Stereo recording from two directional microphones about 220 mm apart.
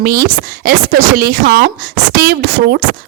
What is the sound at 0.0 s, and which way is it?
A woman's voice, 40° right (ahead or behind).